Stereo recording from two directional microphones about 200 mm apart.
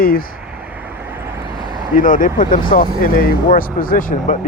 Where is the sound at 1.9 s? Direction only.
40° left (ahead or behind).